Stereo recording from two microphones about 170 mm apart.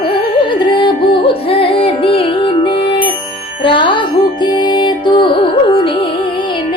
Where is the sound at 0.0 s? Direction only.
30° left (ahead or behind).